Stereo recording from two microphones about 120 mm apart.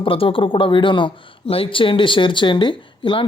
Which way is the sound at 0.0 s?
50° left (ahead or behind).